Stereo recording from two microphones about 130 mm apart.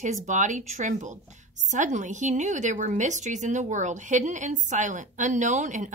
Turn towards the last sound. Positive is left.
turn(degrees=-75)  # may be behind; listen again after turning